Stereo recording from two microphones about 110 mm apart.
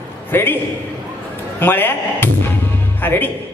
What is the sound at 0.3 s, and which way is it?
Speech, 20° left (ahead or behind).